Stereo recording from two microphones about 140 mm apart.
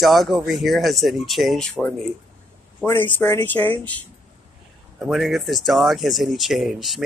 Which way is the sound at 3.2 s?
15° left (ahead or behind).